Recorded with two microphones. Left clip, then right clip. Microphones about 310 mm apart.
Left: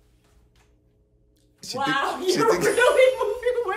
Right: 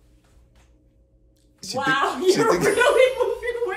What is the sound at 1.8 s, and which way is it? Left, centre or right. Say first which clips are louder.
Speech: right 3 dB; right.